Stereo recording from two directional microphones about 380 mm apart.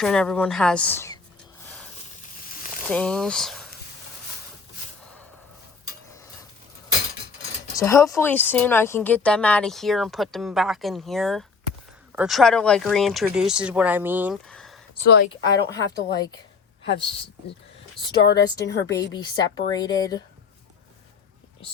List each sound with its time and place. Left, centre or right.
0.0 s speech: centre
1.6 s a sound: centre
2.8 s speech: centre
7.8 s speech: centre
15.0 s a woman's voice: left
15.3 s a woman's voice: centre
18.3 s a woman's voice: left
18.6 s a woman's voice: centre